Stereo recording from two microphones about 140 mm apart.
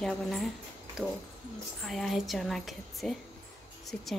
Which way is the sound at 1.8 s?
Centre (ahead or behind).